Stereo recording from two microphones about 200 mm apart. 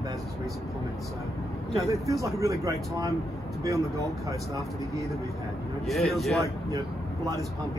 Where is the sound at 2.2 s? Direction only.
15° right (ahead or behind).